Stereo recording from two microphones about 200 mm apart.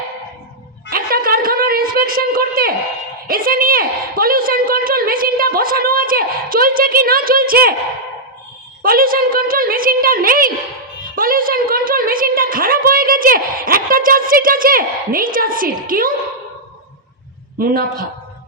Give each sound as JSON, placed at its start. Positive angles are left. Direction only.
{"t": 0.9, "sound": "a sound", "side_deg": -45}
{"t": 3.2, "sound": "a woman's voice", "side_deg": -45}
{"t": 8.8, "sound": "a woman's voice", "side_deg": -45}
{"t": 17.6, "sound": "a woman's voice", "side_deg": -45}